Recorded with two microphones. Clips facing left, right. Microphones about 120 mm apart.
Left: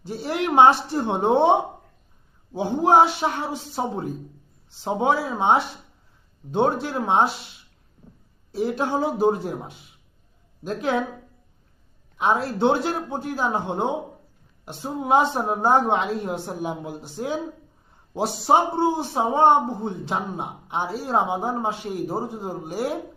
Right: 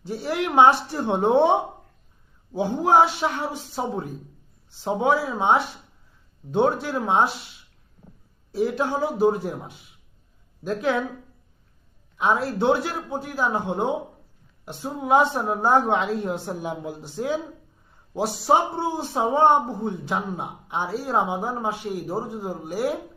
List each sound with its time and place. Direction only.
0.0 s a man's voice: 20° left (ahead or behind)
8.5 s a man's voice: 25° left (ahead or behind)
12.1 s a man's voice: 20° left (ahead or behind)